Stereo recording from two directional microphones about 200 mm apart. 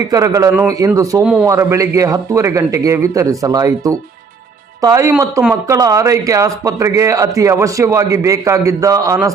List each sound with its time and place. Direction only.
0.1 s a man's voice: 15° right (ahead or behind)
1.2 s a man's voice: 5° right (ahead or behind)
1.5 s a man's voice: 15° right (ahead or behind)